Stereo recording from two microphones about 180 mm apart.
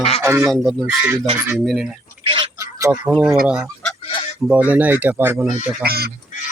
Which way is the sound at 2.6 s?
15° right (ahead or behind).